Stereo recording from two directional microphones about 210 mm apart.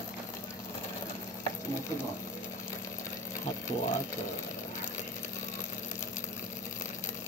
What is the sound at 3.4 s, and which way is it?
Speech, 35° left (ahead or behind).